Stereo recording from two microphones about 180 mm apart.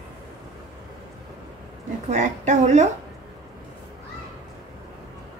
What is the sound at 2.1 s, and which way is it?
Speech, 40° right (ahead or behind).